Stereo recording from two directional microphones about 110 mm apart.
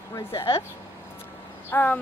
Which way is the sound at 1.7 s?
15° left (ahead or behind).